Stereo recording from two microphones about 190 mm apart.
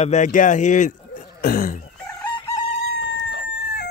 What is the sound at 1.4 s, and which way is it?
Throat clearing, 50° left (ahead or behind).